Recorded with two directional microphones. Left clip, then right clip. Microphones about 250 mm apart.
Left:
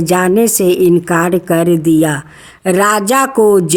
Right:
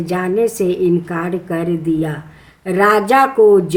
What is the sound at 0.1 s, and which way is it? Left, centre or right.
A woman's voice, left.